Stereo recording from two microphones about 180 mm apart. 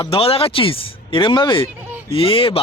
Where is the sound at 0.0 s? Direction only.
30° left (ahead or behind).